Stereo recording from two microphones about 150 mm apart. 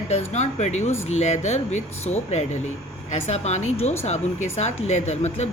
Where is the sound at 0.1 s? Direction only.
45° left (ahead or behind).